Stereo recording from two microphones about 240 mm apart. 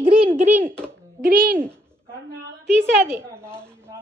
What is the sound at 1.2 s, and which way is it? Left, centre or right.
Speech, right.